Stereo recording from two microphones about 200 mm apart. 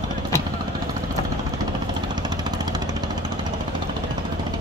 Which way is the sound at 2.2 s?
20° right (ahead or behind).